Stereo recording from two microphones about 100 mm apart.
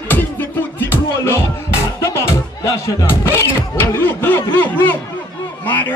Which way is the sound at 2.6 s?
30° left (ahead or behind).